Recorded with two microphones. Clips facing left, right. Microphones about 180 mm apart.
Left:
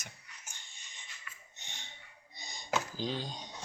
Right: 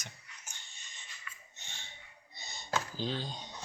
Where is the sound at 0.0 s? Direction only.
10° left (ahead or behind).